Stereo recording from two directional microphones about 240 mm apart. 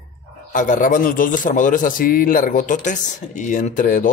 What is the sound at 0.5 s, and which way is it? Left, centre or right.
A man's voice, left.